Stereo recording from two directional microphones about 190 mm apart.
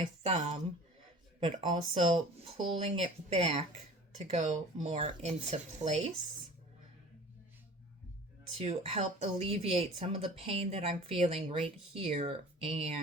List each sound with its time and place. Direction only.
0.2 s speech: 35° right (ahead or behind)
8.6 s speech: 35° right (ahead or behind)